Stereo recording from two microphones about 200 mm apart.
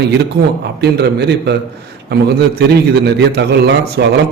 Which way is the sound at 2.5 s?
55° right (ahead or behind).